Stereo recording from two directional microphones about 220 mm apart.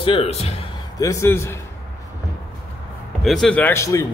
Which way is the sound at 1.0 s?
15° left (ahead or behind).